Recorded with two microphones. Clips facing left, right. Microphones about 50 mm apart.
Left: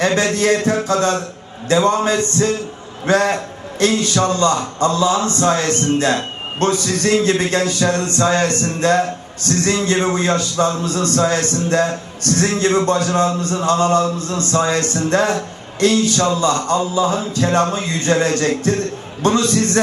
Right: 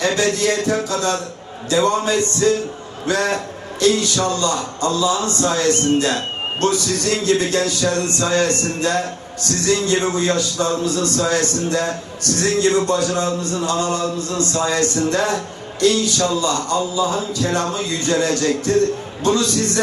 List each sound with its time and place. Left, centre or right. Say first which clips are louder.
0.0 s a man's voice: left 2 dB; left